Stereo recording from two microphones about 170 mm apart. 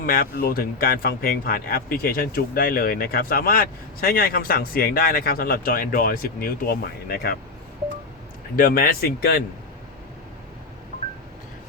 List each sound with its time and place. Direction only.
0.0 s speech: 55° left (ahead or behind)
8.5 s speech: 55° left (ahead or behind)